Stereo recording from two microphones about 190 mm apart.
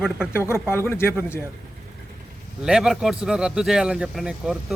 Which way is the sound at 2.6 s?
5° right (ahead or behind).